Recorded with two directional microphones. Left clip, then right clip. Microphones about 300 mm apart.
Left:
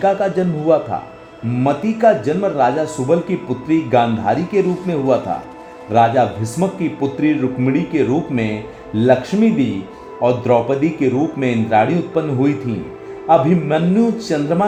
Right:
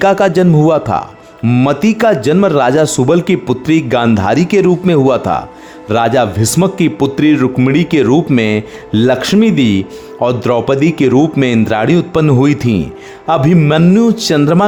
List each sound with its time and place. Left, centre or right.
0.0 s a man's voice: right